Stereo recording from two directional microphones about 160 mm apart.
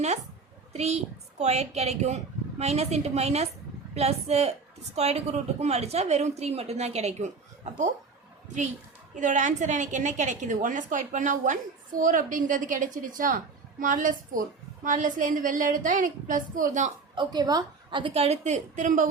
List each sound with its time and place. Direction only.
0.7 s a woman's voice: 40° right (ahead or behind)
9.1 s a woman's voice: 50° right (ahead or behind)
17.2 s a woman's voice: 25° right (ahead or behind); by 19.0 s 50° right (ahead or behind)